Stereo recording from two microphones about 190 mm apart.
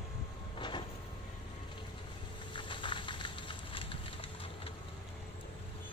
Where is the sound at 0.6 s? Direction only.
25° left (ahead or behind).